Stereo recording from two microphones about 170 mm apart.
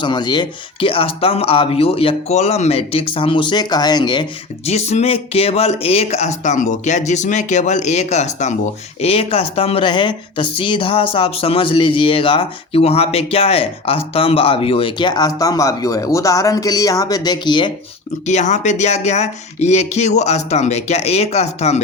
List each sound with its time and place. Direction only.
0.0 s speech: 25° left (ahead or behind)
4.6 s speech: 40° left (ahead or behind)
18.3 s speech: 45° left (ahead or behind)